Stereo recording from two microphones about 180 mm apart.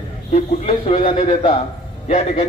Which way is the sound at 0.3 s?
35° left (ahead or behind).